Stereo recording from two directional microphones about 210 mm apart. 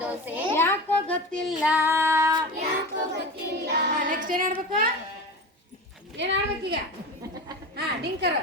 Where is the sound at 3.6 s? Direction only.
45° right (ahead or behind).